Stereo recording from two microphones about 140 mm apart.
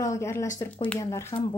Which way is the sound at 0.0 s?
20° left (ahead or behind).